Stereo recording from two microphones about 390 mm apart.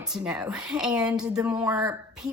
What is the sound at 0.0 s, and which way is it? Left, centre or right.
A woman's voice, centre.